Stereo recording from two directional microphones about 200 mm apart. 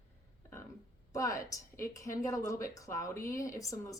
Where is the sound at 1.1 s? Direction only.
15° left (ahead or behind).